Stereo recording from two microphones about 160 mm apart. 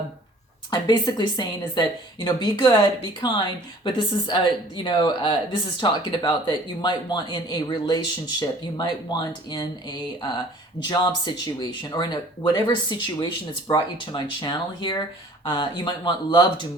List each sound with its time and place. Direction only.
0.7 s a woman's voice: 25° left (ahead or behind)